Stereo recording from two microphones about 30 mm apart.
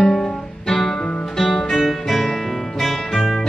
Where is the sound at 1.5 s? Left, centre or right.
Centre.